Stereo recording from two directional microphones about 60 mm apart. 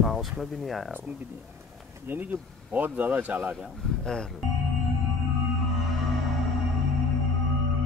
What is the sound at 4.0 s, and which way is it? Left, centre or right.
Speech, centre.